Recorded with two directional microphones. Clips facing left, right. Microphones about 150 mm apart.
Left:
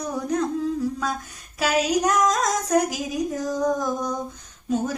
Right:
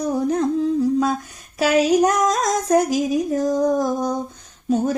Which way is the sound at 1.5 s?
25° right (ahead or behind).